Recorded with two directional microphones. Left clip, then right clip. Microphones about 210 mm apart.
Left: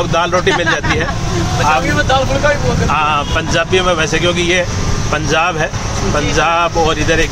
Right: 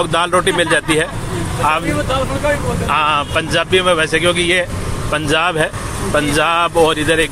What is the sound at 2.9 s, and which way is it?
Speech, 10° right (ahead or behind).